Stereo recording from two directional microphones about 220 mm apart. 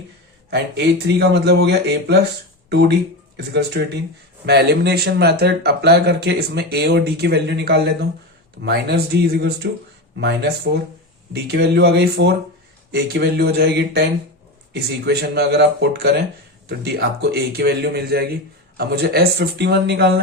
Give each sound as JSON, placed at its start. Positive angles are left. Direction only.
{"t": 0.5, "sound": "speech", "side_deg": -50}